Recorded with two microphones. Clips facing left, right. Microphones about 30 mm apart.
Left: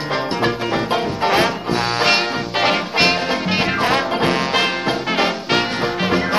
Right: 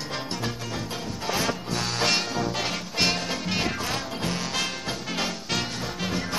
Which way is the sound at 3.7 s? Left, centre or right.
Left.